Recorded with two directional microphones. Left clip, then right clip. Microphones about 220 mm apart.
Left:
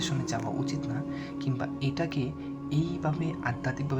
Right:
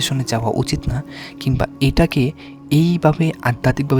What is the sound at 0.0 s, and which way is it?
Speech, 50° right (ahead or behind).